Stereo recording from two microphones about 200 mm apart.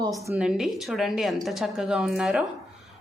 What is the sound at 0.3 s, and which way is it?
A woman's voice, 5° right (ahead or behind).